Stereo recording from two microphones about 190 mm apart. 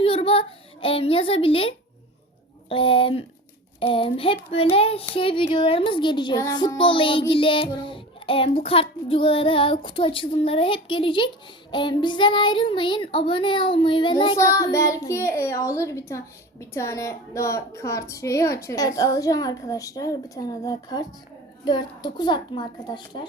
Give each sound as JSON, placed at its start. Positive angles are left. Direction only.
{"t": 0.0, "sound": "a child's voice", "side_deg": 30}
{"t": 14.3, "sound": "a child's voice", "side_deg": 15}